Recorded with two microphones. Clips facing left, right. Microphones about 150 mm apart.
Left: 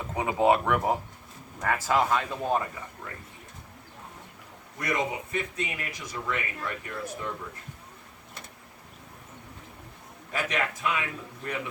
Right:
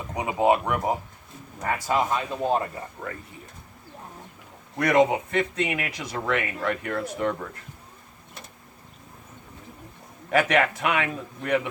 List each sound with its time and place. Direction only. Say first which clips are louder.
0.1 s speech: right 1 dB; 15° right (ahead or behind)
4.8 s speech: right 10 dB; 75° right (ahead or behind)
10.3 s speech: right 9 dB; 75° right (ahead or behind)